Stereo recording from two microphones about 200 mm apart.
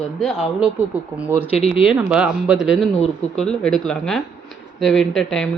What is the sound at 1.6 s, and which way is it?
Speech, 30° left (ahead or behind).